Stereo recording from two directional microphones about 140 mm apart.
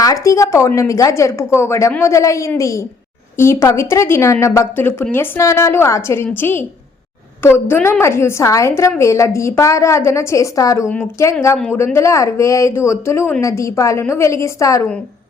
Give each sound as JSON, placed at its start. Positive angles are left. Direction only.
{"t": 0.0, "sound": "a woman's voice", "side_deg": 25}